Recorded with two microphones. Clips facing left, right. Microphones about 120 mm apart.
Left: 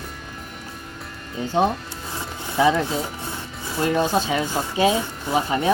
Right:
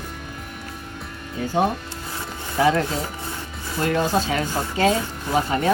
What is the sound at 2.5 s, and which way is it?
Speech, 15° left (ahead or behind).